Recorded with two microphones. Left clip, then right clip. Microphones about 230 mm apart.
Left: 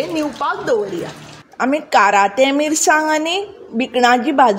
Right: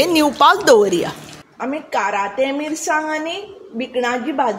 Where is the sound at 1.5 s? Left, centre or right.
Left.